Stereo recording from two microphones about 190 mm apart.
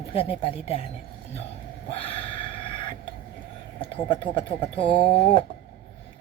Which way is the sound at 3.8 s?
25° left (ahead or behind).